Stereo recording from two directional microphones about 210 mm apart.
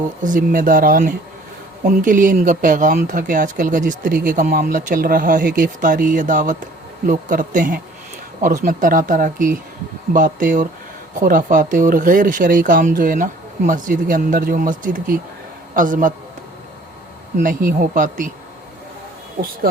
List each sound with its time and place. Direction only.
0.2 s speech: 40° right (ahead or behind)
17.3 s speech: 40° right (ahead or behind)